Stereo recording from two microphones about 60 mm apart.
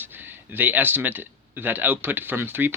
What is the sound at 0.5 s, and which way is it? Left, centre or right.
Speech, right.